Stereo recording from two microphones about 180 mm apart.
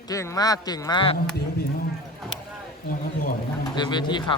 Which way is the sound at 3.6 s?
25° left (ahead or behind).